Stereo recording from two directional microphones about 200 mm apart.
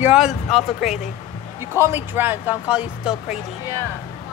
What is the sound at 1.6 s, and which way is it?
Speech, 10° right (ahead or behind).